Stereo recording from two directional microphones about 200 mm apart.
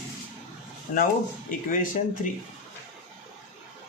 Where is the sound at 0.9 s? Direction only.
40° left (ahead or behind).